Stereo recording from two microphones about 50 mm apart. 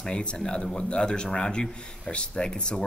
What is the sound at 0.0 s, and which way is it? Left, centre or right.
Speech, centre.